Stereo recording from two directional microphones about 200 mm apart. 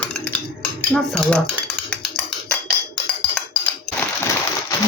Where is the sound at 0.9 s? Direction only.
5° left (ahead or behind).